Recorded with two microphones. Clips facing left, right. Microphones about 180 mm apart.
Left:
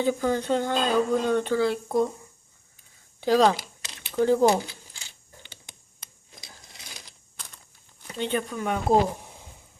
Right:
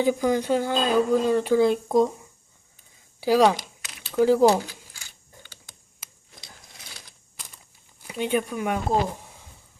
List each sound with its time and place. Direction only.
0.0 s speech: 10° right (ahead or behind)
1.5 s speech: 20° right (ahead or behind)
3.2 s speech: 10° right (ahead or behind)
4.5 s zipper: 20° left (ahead or behind)
6.4 s a sound: 20° left (ahead or behind)
8.0 s speech: 10° right (ahead or behind)